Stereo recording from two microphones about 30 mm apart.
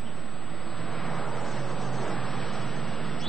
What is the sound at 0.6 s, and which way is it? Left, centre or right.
Vehicle, left.